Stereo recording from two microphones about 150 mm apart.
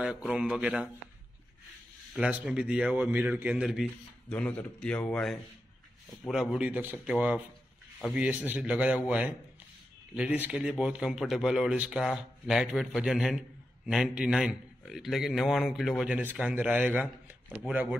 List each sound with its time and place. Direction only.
0.0 s a man's voice: 5° right (ahead or behind)
2.1 s a man's voice: 5° right (ahead or behind)